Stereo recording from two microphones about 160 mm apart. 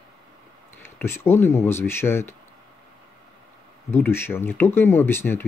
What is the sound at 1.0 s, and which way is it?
Speech, 15° left (ahead or behind).